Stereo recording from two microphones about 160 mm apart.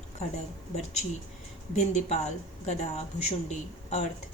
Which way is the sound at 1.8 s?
45° left (ahead or behind).